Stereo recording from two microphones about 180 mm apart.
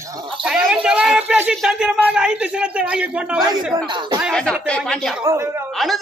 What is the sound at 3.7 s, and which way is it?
Speech, 25° right (ahead or behind).